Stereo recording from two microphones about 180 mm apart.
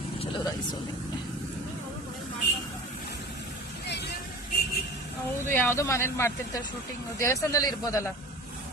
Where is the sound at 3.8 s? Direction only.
70° left (ahead or behind).